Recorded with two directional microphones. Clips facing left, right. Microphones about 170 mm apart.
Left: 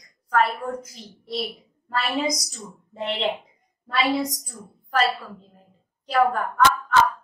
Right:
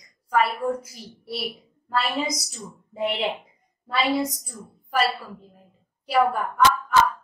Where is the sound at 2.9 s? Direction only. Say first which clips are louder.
Right 2 dB; 10° right (ahead or behind).